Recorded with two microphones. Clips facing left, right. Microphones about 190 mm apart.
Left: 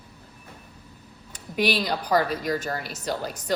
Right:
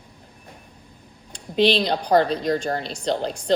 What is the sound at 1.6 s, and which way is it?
Speech, 30° right (ahead or behind).